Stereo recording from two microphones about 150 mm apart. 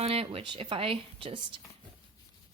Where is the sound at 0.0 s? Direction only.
40° right (ahead or behind).